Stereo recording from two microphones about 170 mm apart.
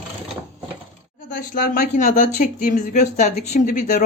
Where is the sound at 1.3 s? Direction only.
65° left (ahead or behind).